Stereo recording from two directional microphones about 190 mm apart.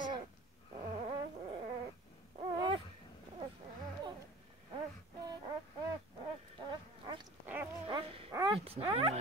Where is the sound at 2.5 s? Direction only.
25° right (ahead or behind).